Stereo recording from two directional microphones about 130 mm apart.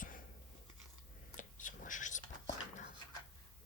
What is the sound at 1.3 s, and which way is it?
Whispering, 80° left.